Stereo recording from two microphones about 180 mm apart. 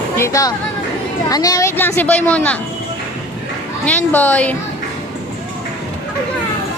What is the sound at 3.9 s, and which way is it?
Speech, 10° left (ahead or behind).